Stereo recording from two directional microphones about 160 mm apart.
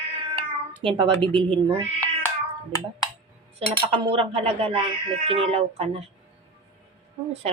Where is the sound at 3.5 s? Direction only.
35° right (ahead or behind).